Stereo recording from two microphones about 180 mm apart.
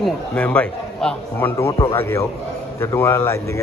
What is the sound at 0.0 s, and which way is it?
A man's voice, 5° left (ahead or behind).